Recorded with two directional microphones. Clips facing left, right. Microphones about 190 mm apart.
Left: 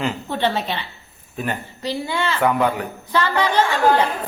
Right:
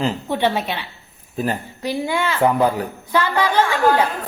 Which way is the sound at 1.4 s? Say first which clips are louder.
Right 3 dB; 35° right (ahead or behind).